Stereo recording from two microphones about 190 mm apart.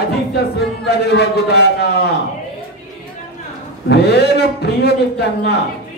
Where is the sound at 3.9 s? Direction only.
60° left (ahead or behind).